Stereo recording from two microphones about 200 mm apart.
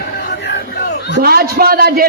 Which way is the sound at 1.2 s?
50° right (ahead or behind).